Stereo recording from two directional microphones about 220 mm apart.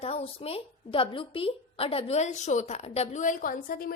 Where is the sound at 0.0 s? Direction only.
25° left (ahead or behind).